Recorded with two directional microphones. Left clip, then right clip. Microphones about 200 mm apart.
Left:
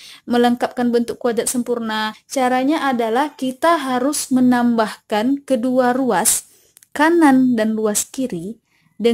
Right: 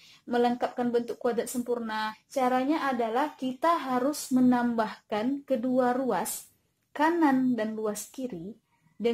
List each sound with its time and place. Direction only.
0.3 s speech: 55° left (ahead or behind)